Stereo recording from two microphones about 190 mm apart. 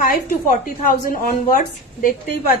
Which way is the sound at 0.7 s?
45° left (ahead or behind).